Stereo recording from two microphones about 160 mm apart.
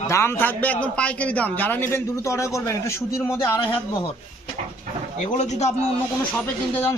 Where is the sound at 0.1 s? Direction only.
15° left (ahead or behind).